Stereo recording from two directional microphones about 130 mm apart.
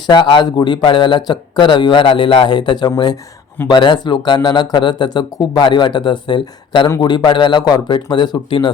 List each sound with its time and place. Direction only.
0.1 s speech: 35° left (ahead or behind)